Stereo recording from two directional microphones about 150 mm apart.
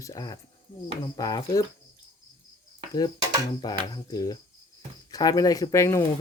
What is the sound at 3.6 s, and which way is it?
Speech, 25° left (ahead or behind).